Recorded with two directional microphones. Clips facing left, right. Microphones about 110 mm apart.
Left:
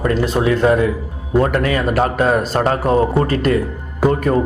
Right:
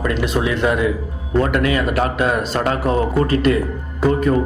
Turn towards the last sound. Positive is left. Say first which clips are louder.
# left 1 dB
turn(degrees=45)  # may be behind; listen again after turning